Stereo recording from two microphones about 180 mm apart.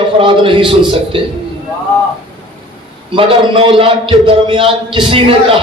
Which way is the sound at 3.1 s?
30° right (ahead or behind).